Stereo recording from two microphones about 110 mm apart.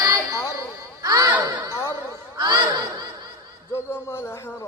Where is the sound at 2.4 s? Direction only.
40° right (ahead or behind).